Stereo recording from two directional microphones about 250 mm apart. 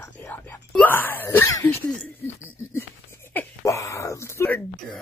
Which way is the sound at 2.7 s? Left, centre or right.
Centre.